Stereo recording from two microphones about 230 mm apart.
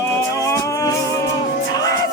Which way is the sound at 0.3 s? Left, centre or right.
Centre.